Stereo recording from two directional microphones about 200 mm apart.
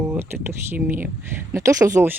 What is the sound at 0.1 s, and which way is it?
Speech, 10° right (ahead or behind).